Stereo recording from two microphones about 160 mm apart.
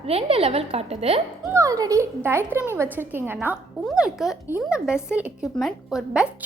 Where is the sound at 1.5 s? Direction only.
20° right (ahead or behind).